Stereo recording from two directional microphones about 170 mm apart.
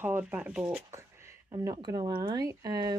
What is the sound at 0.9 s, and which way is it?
Speech, 20° right (ahead or behind).